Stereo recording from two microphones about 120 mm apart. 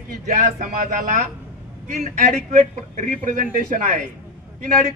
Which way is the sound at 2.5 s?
90° right.